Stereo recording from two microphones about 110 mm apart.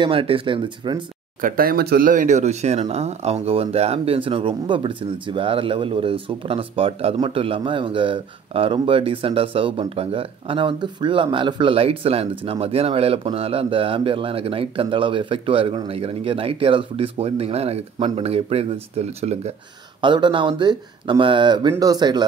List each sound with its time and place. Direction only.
0.0 s speech: 55° right (ahead or behind)
2.2 s speech: 90° right; by 17.8 s 70° right (ahead or behind)
17.9 s speech: 60° right (ahead or behind); by 19.5 s 75° right (ahead or behind)
20.0 s speech: 45° right (ahead or behind)